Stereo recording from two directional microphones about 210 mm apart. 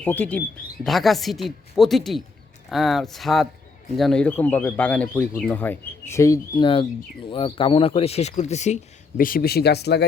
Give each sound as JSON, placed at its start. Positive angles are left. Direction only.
{"t": 0.0, "sound": "speech", "side_deg": 10}